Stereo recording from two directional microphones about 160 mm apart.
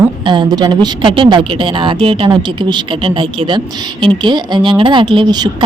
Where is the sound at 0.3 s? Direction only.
25° right (ahead or behind).